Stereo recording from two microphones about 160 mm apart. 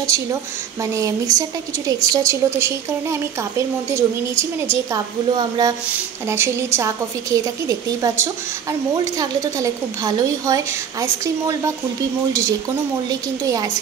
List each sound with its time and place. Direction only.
0.0 s speech: 20° right (ahead or behind)
5.9 s a woman's voice: 10° right (ahead or behind)